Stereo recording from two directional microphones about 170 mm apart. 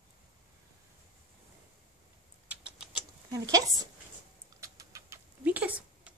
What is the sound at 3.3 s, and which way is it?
Speech, 20° right (ahead or behind).